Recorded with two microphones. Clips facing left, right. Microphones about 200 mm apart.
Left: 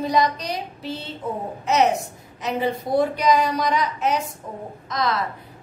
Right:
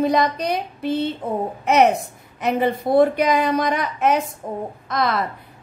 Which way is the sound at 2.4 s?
55° right (ahead or behind).